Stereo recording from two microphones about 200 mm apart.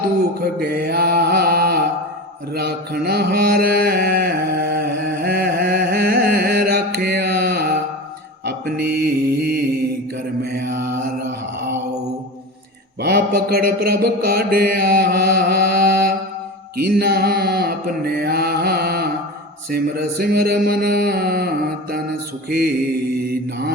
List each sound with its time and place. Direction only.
0.3 s music: 50° right (ahead or behind)
2.6 s mantra: 55° right (ahead or behind)
13.0 s mantra: 50° right (ahead or behind)